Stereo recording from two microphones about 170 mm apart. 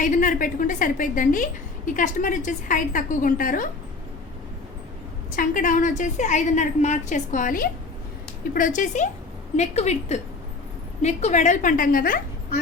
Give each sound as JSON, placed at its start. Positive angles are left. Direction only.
{"t": 0.0, "sound": "a woman's voice", "side_deg": 50}
{"t": 5.4, "sound": "a woman's voice", "side_deg": 50}